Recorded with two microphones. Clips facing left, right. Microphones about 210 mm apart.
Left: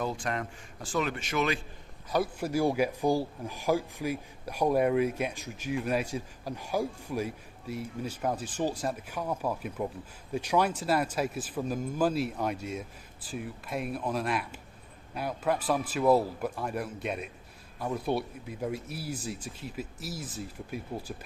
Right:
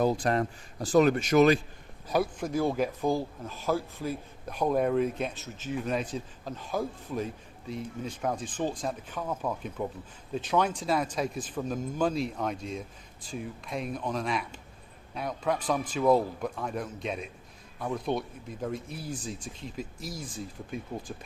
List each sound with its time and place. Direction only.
0.0 s speech: 40° right (ahead or behind)
2.4 s speech: 10° left (ahead or behind)